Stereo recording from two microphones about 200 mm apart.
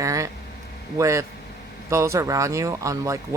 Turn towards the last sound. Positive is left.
turn(degrees=-15)  # may be behind; listen again after turning